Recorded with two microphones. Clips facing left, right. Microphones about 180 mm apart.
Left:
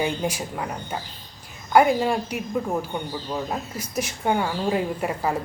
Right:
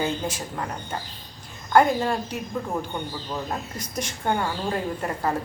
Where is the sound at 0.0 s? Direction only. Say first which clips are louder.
Left 2 dB; 10° left (ahead or behind).